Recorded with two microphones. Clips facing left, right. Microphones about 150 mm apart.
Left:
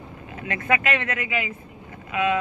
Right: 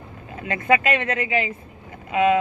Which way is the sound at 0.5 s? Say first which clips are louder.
Right 4 dB; 25° right (ahead or behind).